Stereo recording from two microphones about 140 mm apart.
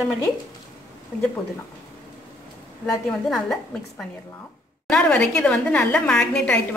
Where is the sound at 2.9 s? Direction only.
Centre (ahead or behind).